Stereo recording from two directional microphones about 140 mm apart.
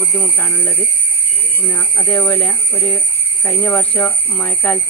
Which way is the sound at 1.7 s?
15° left (ahead or behind).